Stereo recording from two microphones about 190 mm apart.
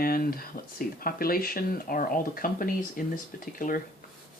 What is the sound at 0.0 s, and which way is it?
Speech, 50° left (ahead or behind).